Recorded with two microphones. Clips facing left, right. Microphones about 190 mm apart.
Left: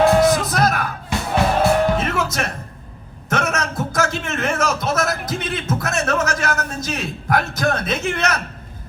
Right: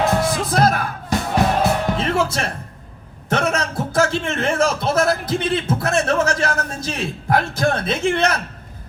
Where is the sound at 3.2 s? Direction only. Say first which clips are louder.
Right 2 dB; 30° right (ahead or behind).